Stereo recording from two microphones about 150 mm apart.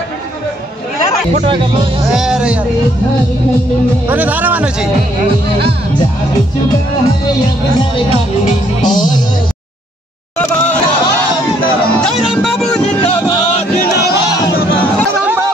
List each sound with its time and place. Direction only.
1.3 s speech: 35° right (ahead or behind)
2.1 s speech: 5° right (ahead or behind)
4.1 s speech: 10° right (ahead or behind)
8.8 s music: 30° left (ahead or behind)
12.0 s music: centre (ahead or behind)
15.2 s a sound: 15° right (ahead or behind)